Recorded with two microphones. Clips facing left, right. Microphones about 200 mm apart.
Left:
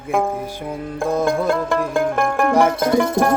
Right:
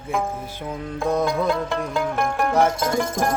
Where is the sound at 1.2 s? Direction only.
50° left (ahead or behind).